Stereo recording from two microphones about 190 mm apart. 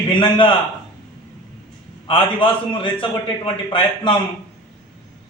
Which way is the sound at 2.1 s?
25° left (ahead or behind).